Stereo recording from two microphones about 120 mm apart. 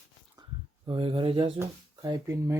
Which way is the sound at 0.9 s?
45° right (ahead or behind).